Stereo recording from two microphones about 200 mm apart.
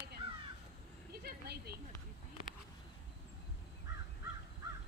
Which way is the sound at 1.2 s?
50° right (ahead or behind).